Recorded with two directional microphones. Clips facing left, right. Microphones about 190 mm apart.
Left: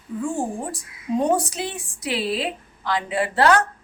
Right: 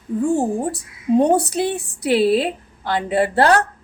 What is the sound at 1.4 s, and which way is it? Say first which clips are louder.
A woman's voice: right 8 dB; 65° right (ahead or behind).